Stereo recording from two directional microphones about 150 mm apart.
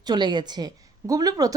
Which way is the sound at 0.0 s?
30° right (ahead or behind).